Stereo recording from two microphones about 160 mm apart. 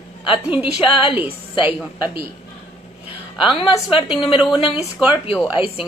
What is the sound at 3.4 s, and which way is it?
A woman's voice, 30° left (ahead or behind).